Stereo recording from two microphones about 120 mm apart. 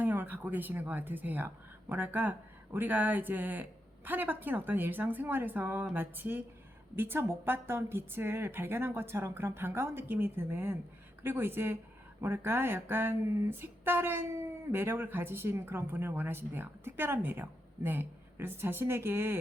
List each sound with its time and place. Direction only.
0.0 s speech: 15° right (ahead or behind)